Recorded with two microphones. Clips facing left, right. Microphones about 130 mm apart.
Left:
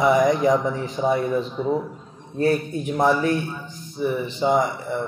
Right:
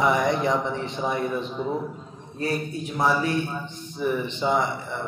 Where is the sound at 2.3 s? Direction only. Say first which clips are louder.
Left 6 dB; 45° left (ahead or behind).